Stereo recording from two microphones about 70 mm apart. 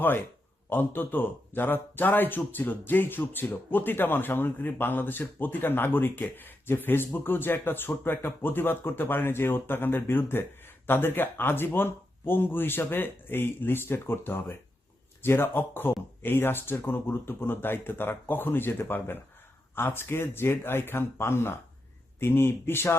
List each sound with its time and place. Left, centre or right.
0.7 s speech: left